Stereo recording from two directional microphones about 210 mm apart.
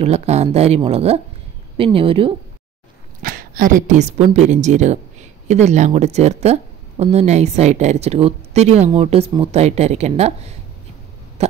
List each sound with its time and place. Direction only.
0.0 s speech: 30° right (ahead or behind)
3.2 s a woman's voice: 45° right (ahead or behind)